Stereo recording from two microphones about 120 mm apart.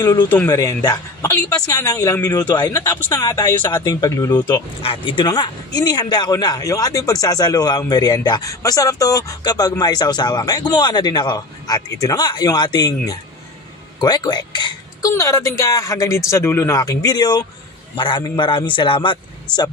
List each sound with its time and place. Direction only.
0.5 s a man's voice: 30° left (ahead or behind)
4.8 s a man's voice: 40° left (ahead or behind)